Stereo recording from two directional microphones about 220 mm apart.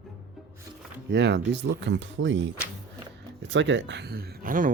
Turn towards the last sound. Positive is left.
turn(degrees=-40)  # may be behind; listen again after turning